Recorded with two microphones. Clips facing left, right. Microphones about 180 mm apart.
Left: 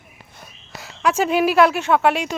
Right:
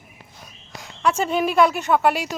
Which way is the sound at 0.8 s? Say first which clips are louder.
Left 2 dB; 5° left (ahead or behind).